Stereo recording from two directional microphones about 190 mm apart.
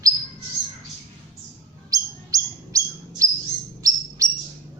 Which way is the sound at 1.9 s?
20° right (ahead or behind).